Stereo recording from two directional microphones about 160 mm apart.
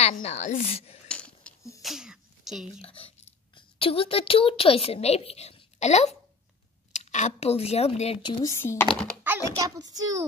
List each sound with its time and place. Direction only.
0.0 s a woman's voice: 40° left (ahead or behind)
1.0 s a sound: 5° left (ahead or behind)
1.8 s sneeze: centre (ahead or behind)
2.8 s speech: 35° left (ahead or behind)
8.5 s speech: 15° left (ahead or behind)
9.2 s typing: 10° right (ahead or behind)
9.8 s a child's voice: 25° right (ahead or behind)